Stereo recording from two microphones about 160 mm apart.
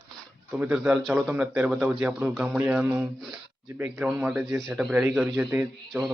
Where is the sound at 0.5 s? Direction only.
10° right (ahead or behind).